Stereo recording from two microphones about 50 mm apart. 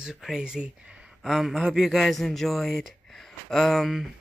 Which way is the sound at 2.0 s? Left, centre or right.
Centre.